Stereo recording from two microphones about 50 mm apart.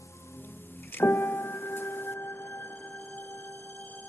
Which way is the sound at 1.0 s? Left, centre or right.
Left.